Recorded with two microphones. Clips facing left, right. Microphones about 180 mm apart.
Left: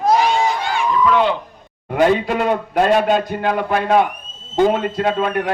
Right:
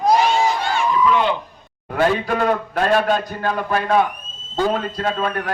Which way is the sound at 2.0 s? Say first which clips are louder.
Left 3 dB; 20° left (ahead or behind).